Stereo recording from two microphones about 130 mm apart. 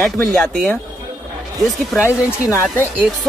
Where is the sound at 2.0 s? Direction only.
20° left (ahead or behind).